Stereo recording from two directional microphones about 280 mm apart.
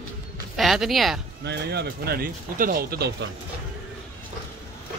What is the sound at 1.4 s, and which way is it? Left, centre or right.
Speech, right.